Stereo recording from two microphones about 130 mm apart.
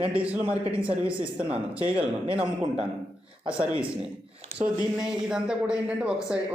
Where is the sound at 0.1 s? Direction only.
10° right (ahead or behind).